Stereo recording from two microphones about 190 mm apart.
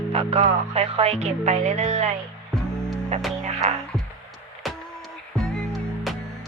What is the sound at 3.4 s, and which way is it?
Music, 35° right (ahead or behind).